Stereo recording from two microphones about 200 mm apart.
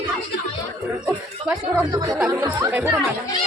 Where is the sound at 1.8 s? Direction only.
20° right (ahead or behind).